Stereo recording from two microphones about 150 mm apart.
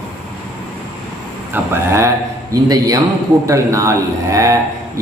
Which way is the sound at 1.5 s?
15° right (ahead or behind).